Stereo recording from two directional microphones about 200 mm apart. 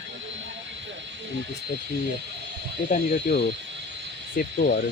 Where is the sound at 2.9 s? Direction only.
55° left (ahead or behind).